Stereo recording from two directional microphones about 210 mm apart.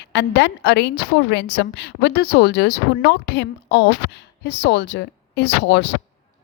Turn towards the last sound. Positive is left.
turn(degrees=55)  # may be behind; listen again after turning